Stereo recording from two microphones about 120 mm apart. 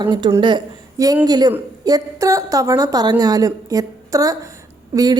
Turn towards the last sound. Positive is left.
turn(degrees=-30)  # may be behind; listen again after turning